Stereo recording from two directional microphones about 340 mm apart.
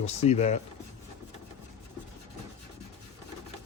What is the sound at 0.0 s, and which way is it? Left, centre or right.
Speech, centre.